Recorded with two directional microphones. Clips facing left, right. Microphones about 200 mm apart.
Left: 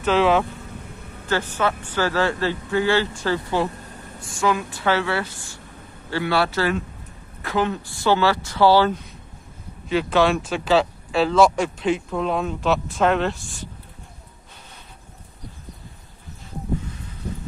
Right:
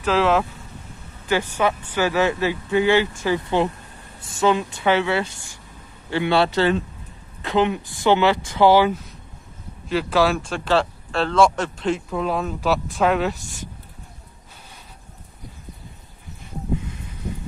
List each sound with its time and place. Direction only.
0.0 s speech: centre (ahead or behind)
1.3 s a man's voice: 15° right (ahead or behind)
9.8 s speech: centre (ahead or behind)